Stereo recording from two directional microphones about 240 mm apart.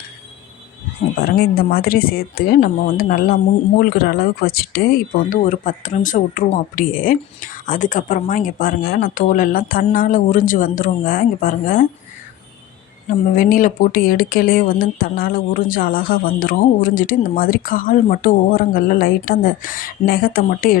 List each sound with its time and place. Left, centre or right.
1.2 s speech: left
13.3 s speech: left